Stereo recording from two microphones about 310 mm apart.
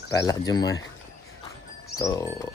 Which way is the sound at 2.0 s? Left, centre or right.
Centre.